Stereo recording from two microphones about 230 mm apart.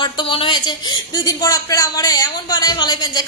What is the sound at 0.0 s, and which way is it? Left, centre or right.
A woman's voice, left.